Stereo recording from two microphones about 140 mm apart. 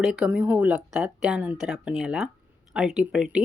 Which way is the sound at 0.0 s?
5° right (ahead or behind).